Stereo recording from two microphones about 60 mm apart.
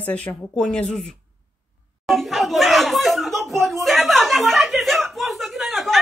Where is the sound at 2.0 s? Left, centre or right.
Centre.